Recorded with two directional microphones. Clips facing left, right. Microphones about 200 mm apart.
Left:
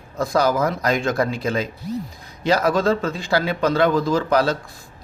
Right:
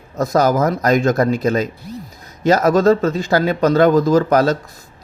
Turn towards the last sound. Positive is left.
turn(degrees=-45)  # may be behind; listen again after turning